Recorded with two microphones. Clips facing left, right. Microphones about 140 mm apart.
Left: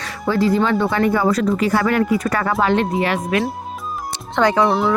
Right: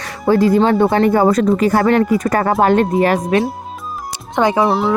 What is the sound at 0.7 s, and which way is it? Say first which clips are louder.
Speech: right 5 dB; 45° right (ahead or behind).